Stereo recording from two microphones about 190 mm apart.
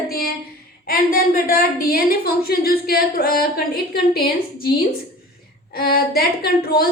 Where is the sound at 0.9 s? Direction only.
50° left (ahead or behind).